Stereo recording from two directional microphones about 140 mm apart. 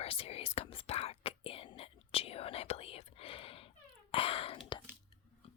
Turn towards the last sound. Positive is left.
turn(degrees=35)  # may be behind; listen again after turning